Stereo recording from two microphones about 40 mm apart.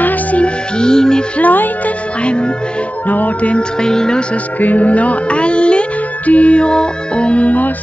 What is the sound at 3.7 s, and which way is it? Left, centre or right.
Music, centre.